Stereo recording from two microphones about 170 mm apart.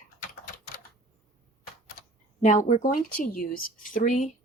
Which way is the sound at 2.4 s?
50° left (ahead or behind).